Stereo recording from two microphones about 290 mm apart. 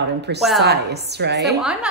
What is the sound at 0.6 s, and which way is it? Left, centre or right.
Speech, right.